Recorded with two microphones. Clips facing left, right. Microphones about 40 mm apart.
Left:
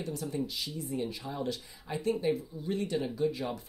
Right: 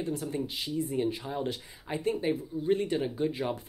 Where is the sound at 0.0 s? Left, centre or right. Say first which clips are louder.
Right 2 dB; right.